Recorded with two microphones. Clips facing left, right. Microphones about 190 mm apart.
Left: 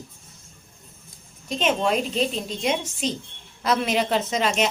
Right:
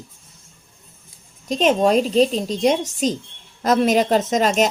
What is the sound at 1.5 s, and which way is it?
A woman's voice, 40° right (ahead or behind).